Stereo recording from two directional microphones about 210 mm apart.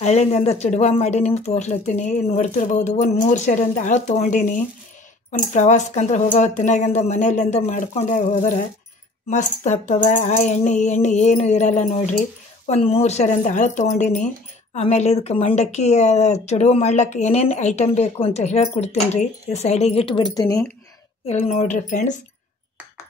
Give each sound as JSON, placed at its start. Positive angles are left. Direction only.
{"t": 0.0, "sound": "speech", "side_deg": 30}
{"t": 21.3, "sound": "speech", "side_deg": 30}